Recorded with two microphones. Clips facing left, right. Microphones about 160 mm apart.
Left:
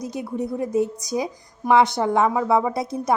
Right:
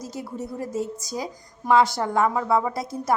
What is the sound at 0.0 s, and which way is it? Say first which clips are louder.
A woman's voice: left 6 dB; 20° left (ahead or behind).